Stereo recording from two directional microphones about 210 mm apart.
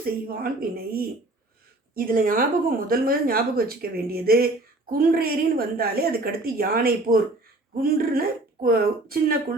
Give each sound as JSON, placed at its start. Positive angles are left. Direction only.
{"t": 0.0, "sound": "speech", "side_deg": -45}